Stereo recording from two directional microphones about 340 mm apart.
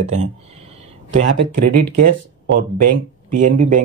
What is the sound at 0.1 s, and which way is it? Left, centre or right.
Speech, centre.